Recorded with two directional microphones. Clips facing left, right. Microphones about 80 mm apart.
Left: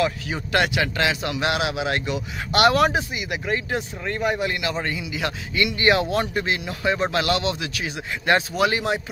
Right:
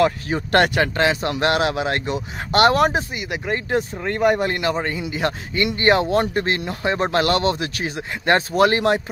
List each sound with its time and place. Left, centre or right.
0.0 s speech: right
1.3 s speech: right